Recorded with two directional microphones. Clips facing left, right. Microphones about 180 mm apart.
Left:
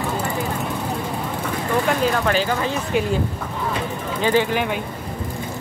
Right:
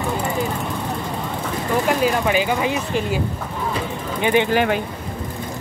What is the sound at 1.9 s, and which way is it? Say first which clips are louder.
Speech: right 2 dB; 5° right (ahead or behind).